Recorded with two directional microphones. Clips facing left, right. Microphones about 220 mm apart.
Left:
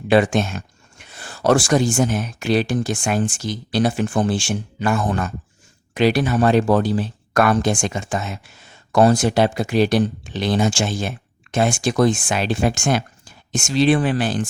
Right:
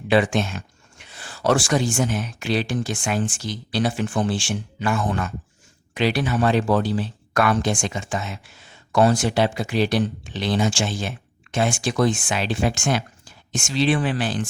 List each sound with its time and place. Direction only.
0.1 s speech: 45° left (ahead or behind)